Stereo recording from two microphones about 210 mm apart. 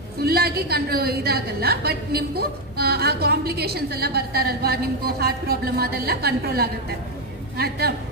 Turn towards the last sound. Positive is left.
turn(degrees=-50)  # may be behind; listen again after turning